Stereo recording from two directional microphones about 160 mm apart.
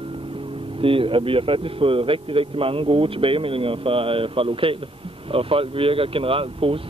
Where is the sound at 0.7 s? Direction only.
35° right (ahead or behind).